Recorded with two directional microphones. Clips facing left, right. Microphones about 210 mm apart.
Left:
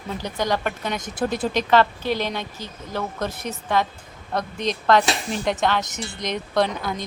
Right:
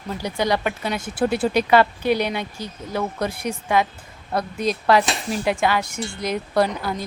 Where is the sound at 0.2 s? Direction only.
10° right (ahead or behind).